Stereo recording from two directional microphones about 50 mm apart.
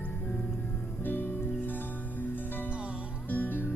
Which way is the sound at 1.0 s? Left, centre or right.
Left.